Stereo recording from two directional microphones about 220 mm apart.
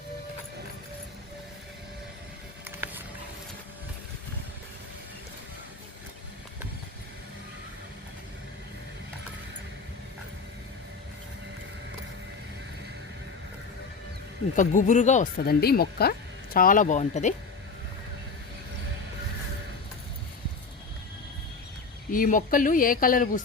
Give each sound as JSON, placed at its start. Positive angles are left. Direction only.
{"t": 2.6, "sound": "boat", "side_deg": -10}
{"t": 14.5, "sound": "speech", "side_deg": 35}
{"t": 22.1, "sound": "speech", "side_deg": 40}